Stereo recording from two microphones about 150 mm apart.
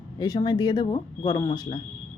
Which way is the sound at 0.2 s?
25° left (ahead or behind).